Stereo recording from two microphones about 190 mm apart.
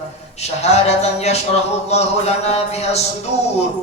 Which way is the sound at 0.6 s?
35° left (ahead or behind).